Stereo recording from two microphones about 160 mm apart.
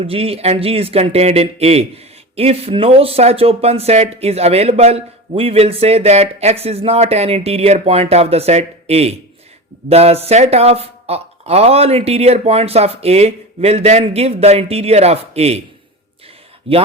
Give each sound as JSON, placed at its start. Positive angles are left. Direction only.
{"t": 0.0, "sound": "speech", "side_deg": -35}
{"t": 16.7, "sound": "speech", "side_deg": -35}